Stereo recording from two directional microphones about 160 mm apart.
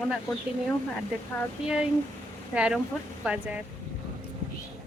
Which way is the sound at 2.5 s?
5° right (ahead or behind).